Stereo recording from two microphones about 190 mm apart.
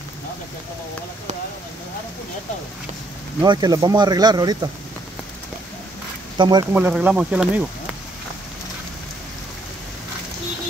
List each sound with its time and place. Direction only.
3.4 s speech: 20° right (ahead or behind)
6.3 s speech: 25° right (ahead or behind)
6.7 s speech: 5° right (ahead or behind)